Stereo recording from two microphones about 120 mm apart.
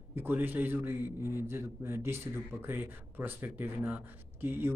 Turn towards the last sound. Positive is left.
turn(degrees=-20)  # may be behind; listen again after turning